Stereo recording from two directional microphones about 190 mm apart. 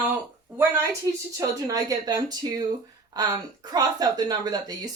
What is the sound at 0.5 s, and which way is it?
Speech, 10° right (ahead or behind).